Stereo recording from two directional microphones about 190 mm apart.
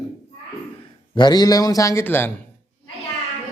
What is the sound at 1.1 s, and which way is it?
Speech, 20° left (ahead or behind).